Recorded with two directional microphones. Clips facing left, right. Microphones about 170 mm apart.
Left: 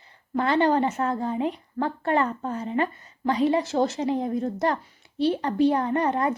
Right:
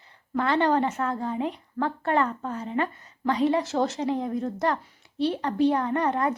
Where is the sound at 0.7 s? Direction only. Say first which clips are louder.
Left 1 dB; 25° left (ahead or behind).